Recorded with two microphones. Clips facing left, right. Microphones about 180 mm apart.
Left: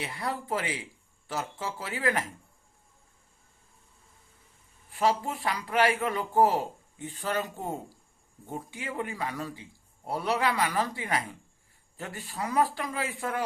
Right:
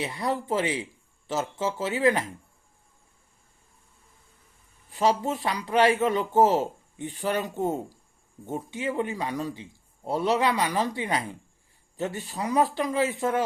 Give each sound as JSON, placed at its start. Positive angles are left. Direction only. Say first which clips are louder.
{"t": 0.0, "sound": "speech", "louder": "right 5 dB", "side_deg": -20}
{"t": 4.9, "sound": "speech", "louder": "right 3 dB", "side_deg": -20}